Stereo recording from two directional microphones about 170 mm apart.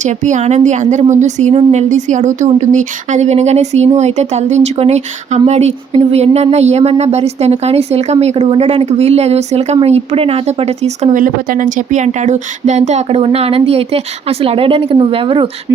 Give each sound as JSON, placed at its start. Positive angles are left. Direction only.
{"t": 0.0, "sound": "a woman's voice", "side_deg": -45}